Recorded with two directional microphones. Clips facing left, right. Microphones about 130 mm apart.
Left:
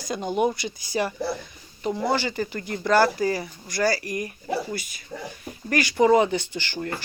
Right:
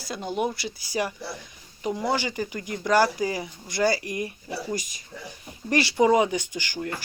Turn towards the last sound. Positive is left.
turn(degrees=-10)  # may be behind; listen again after turning